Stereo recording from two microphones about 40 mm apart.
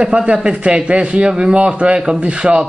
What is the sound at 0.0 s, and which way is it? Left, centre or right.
A man's voice, right.